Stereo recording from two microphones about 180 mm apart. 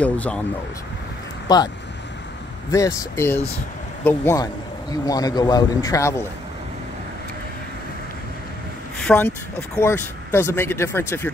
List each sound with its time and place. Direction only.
0.0 s speech: 5° left (ahead or behind)
1.5 s a man's voice: 20° left (ahead or behind)
2.7 s a man's voice: 20° left (ahead or behind)
8.9 s speech: 10° left (ahead or behind)